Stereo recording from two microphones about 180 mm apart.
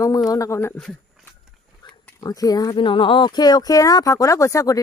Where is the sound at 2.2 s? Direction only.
20° left (ahead or behind).